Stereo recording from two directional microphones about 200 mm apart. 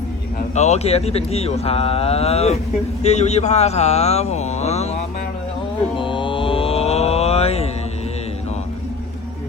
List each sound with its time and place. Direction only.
0.5 s speech: 35° left (ahead or behind)
6.0 s mantra: 25° left (ahead or behind)